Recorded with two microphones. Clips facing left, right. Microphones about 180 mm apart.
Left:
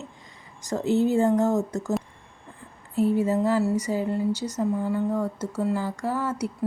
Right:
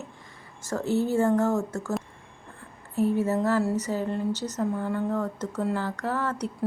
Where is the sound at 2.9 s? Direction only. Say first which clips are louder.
Left 2 dB; 15° left (ahead or behind).